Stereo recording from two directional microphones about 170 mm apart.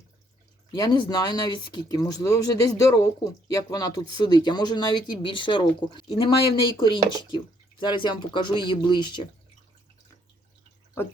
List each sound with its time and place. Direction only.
0.7 s speech: 25° left (ahead or behind)